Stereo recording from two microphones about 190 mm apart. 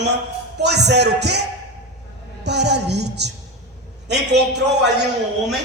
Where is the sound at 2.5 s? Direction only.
60° right (ahead or behind).